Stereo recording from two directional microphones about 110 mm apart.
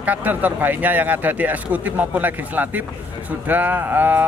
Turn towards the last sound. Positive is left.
turn(degrees=-15)  # may be behind; listen again after turning